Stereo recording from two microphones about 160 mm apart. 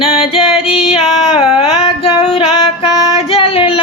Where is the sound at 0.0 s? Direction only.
35° left (ahead or behind).